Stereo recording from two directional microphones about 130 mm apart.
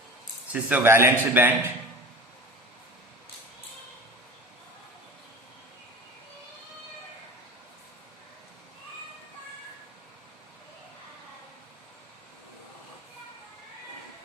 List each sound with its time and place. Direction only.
0.5 s speech: 10° right (ahead or behind)